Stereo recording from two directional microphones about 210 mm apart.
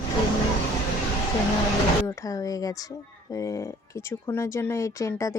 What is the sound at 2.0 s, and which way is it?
Speech, 15° left (ahead or behind).